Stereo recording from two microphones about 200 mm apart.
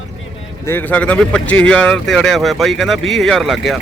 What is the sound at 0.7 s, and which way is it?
Speech, 10° left (ahead or behind).